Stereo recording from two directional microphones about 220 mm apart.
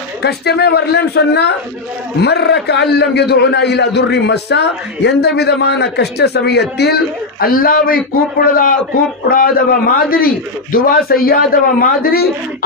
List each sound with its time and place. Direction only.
0.2 s a man's voice: 50° left (ahead or behind)